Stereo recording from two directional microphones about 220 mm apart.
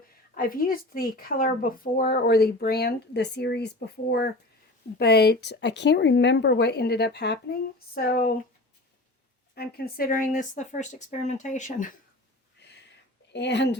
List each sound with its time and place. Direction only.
0.3 s speech: 40° left (ahead or behind)
9.6 s speech: 45° left (ahead or behind)
12.5 s a sound: 50° left (ahead or behind)
13.3 s speech: 50° left (ahead or behind)